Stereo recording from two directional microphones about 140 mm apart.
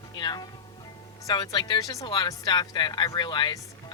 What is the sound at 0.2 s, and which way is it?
Speech, 30° left (ahead or behind).